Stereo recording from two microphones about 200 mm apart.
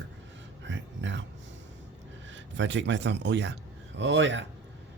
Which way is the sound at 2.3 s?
65° right (ahead or behind).